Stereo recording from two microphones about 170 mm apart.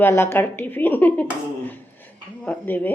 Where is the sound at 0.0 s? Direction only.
15° left (ahead or behind).